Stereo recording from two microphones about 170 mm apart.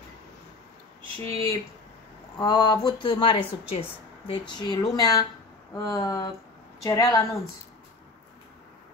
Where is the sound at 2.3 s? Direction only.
25° left (ahead or behind).